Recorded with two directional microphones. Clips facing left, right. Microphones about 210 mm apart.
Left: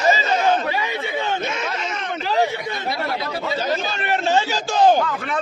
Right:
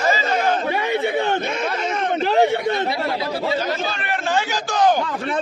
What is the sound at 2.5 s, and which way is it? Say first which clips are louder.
Speech: right 8 dB; 60° right (ahead or behind).